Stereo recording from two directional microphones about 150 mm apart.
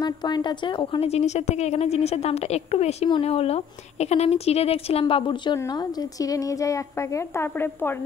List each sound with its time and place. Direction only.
0.0 s a woman's voice: 30° left (ahead or behind)